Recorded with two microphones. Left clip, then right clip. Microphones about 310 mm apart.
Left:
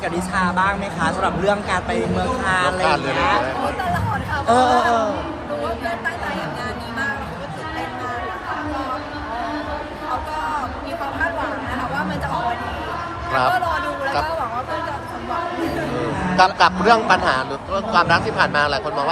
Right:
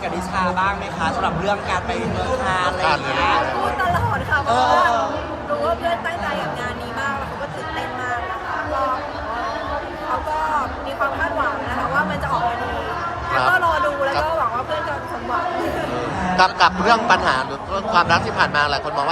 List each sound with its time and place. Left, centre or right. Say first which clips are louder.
0.3 s speech: left 1 dB; left
4.4 s speech: left 2 dB; left
13.3 s a man's voice: right 1 dB; centre
16.3 s a man's voice: left 1 dB; centre